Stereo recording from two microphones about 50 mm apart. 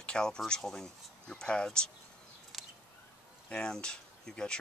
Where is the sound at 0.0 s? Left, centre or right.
Centre.